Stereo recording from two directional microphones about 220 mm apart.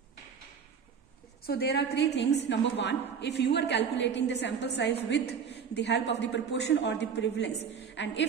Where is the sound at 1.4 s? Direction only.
45° left (ahead or behind).